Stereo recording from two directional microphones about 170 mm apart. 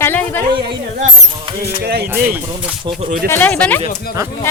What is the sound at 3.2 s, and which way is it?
Speech, 10° left (ahead or behind).